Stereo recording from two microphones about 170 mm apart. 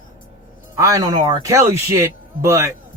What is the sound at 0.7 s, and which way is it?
A man's voice, 20° right (ahead or behind).